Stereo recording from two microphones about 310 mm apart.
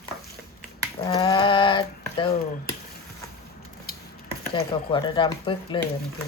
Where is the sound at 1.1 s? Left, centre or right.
Centre.